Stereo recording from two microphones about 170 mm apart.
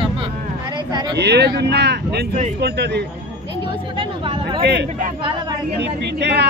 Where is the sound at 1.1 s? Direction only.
80° right.